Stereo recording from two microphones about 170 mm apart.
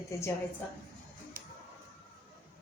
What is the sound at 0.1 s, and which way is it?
Speech, 15° left (ahead or behind).